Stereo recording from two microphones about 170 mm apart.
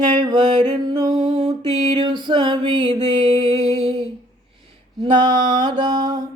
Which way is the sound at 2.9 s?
40° right (ahead or behind).